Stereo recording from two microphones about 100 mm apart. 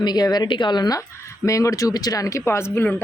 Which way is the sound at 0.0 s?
45° left (ahead or behind).